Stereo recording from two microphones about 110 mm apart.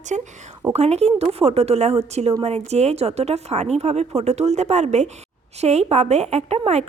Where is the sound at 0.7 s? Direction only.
80° right.